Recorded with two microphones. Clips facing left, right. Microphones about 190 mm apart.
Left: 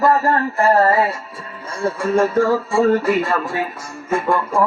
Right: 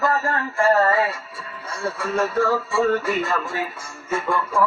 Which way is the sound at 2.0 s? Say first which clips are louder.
Left 6 dB; 50° left (ahead or behind).